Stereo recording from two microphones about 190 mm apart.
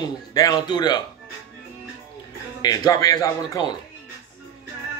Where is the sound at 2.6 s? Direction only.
20° left (ahead or behind).